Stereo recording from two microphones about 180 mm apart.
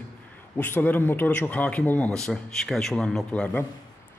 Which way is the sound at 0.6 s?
10° left (ahead or behind).